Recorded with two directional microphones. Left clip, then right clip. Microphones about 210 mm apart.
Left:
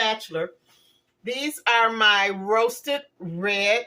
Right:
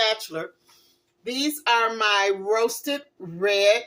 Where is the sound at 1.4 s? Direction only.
30° right (ahead or behind).